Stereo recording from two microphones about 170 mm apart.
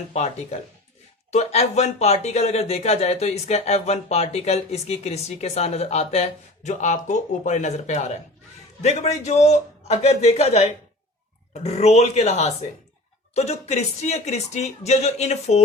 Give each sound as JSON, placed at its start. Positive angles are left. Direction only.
{"t": 0.1, "sound": "speech", "side_deg": 40}